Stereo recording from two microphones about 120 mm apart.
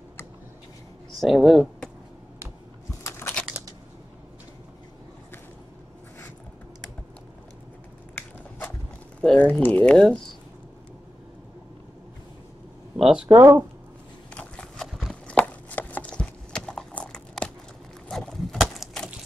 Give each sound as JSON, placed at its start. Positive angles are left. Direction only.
{"t": 1.2, "sound": "speech", "side_deg": 0}
{"t": 3.0, "sound": "biting", "side_deg": 25}
{"t": 8.1, "sound": "a sound", "side_deg": 15}
{"t": 9.2, "sound": "speech", "side_deg": 5}
{"t": 12.9, "sound": "speech", "side_deg": -5}
{"t": 13.4, "sound": "speech", "side_deg": -20}
{"t": 14.3, "sound": "walk", "side_deg": 10}
{"t": 15.3, "sound": "a sound", "side_deg": 15}